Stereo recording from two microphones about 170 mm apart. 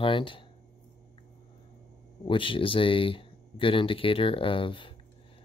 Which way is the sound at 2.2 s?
30° left (ahead or behind).